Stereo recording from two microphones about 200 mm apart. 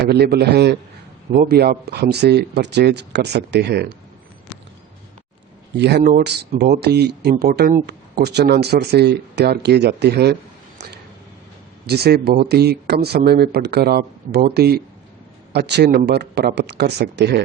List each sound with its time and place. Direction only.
0.0 s speech: 50° right (ahead or behind)
5.7 s speech: 55° right (ahead or behind)
11.9 s speech: 50° right (ahead or behind)